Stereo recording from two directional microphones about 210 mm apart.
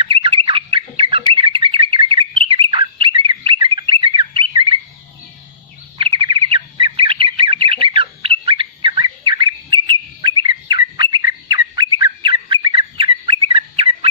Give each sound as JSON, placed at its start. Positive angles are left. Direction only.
{"t": 0.0, "sound": "bird", "side_deg": -25}
{"t": 5.9, "sound": "squawk", "side_deg": -25}